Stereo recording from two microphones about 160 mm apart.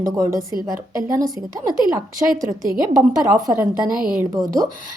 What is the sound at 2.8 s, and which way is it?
A woman's voice, 20° right (ahead or behind).